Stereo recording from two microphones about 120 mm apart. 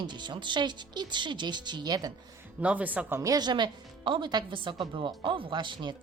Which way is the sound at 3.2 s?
35° right (ahead or behind).